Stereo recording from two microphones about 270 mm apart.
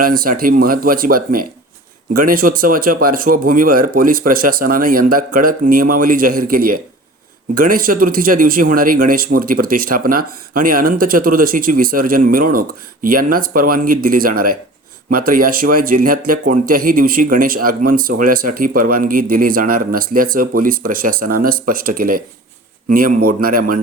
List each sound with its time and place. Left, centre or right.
0.0 s speech: right